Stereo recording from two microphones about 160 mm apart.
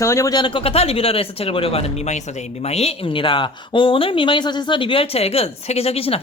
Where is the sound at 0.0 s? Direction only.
20° left (ahead or behind).